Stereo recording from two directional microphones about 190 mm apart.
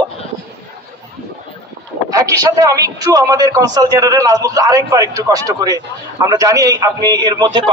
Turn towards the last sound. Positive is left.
turn(degrees=-20)  # may be behind; listen again after turning